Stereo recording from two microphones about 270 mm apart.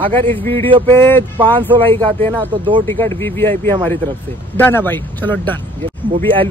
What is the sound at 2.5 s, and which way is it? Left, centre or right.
Speech, centre.